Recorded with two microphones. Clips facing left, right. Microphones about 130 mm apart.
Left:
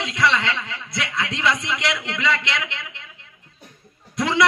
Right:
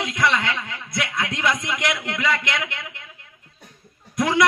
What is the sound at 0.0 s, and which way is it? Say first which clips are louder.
A man's voice: left 1 dB; 50° right (ahead or behind).